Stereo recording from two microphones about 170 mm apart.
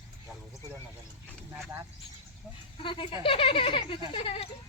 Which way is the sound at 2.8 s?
30° left (ahead or behind).